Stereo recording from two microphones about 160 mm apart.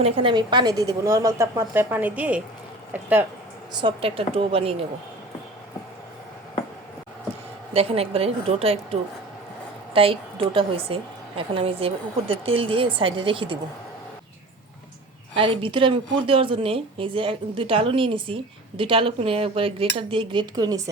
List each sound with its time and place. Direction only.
0.0 s a woman's voice: 35° right (ahead or behind); by 3.2 s 10° right (ahead or behind)
3.7 s a woman's voice: 30° right (ahead or behind)
7.7 s a woman's voice: 40° right (ahead or behind)
15.4 s a woman's voice: 30° right (ahead or behind)